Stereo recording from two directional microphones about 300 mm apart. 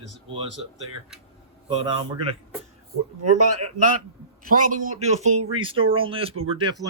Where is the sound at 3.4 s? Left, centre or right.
Right.